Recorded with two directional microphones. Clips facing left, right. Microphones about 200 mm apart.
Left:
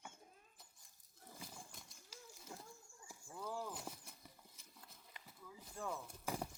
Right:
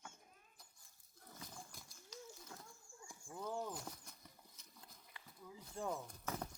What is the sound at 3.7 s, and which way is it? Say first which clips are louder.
Horse: even; 5° left (ahead or behind).